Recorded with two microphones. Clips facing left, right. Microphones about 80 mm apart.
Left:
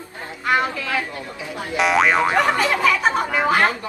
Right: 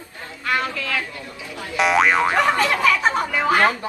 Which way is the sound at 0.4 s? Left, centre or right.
Left.